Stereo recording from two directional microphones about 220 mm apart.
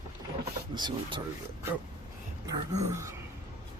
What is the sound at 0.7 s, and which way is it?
Speech, 20° right (ahead or behind).